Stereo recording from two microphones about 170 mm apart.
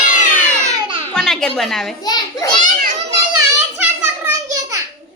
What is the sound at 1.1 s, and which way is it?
Speech, 5° left (ahead or behind).